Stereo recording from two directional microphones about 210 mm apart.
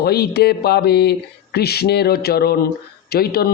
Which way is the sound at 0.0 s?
50° left (ahead or behind).